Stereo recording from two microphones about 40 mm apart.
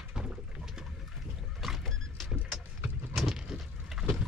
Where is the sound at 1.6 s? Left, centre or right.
Centre.